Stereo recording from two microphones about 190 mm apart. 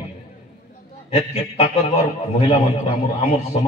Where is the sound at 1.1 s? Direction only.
35° left (ahead or behind).